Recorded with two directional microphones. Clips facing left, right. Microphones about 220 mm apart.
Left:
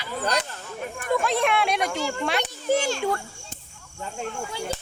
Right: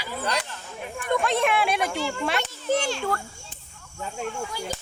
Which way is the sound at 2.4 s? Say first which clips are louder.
Left 2 dB; 10° left (ahead or behind).